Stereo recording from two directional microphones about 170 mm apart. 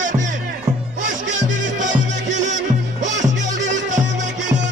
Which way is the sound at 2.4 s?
45° right (ahead or behind).